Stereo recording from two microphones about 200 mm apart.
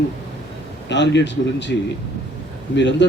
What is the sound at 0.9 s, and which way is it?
Speech, 60° left (ahead or behind).